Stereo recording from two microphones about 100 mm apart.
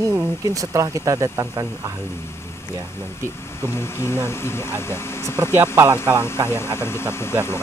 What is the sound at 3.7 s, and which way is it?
Speech, 25° left (ahead or behind).